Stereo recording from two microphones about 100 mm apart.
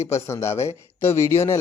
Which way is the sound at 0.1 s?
30° left (ahead or behind).